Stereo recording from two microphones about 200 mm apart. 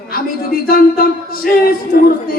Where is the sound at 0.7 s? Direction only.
50° left (ahead or behind).